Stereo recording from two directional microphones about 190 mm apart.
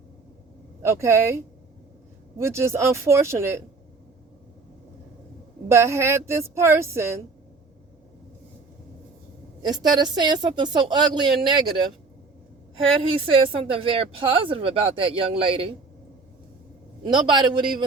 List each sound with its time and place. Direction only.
0.8 s a woman's voice: 15° right (ahead or behind)
5.6 s a woman's voice: 15° right (ahead or behind)
9.6 s a woman's voice: 20° right (ahead or behind)
12.7 s a woman's voice: 30° right (ahead or behind)
17.1 s a woman's voice: 25° right (ahead or behind)